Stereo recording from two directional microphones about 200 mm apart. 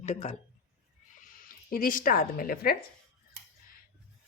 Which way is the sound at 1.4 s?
45° left (ahead or behind).